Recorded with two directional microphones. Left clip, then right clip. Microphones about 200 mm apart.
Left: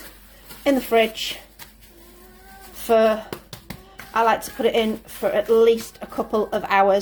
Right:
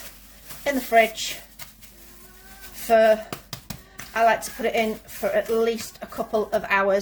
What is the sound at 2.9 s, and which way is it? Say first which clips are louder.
Speech: even; 30° left (ahead or behind).